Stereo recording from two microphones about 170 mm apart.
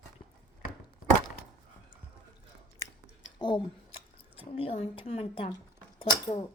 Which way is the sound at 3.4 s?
30° left (ahead or behind).